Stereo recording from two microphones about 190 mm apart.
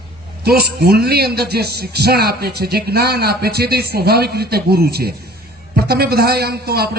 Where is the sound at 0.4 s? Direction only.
55° right (ahead or behind).